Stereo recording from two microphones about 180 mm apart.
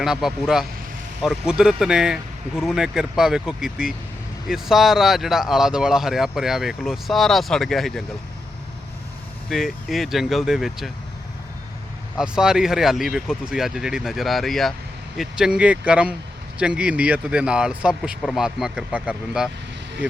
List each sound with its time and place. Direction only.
0.0 s speech: centre (ahead or behind)
9.5 s speech: centre (ahead or behind)
12.2 s speech: 5° right (ahead or behind)